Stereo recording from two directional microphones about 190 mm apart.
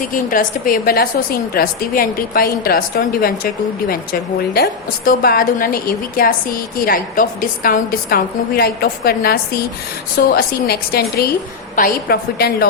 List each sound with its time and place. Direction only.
0.1 s a woman's voice: 45° left (ahead or behind)